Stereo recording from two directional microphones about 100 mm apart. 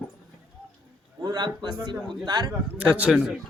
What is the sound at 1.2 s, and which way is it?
Speech, 45° right (ahead or behind).